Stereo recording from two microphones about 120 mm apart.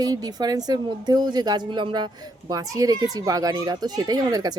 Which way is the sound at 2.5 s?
30° right (ahead or behind).